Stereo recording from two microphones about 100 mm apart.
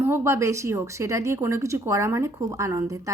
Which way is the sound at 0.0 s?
25° right (ahead or behind).